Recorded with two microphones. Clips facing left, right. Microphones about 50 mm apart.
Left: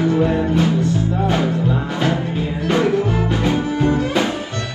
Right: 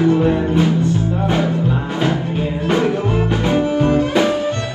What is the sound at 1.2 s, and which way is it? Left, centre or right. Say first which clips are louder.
Music: right 1 dB; right.